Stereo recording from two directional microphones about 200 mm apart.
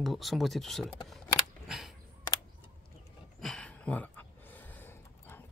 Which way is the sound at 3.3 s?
5° left (ahead or behind).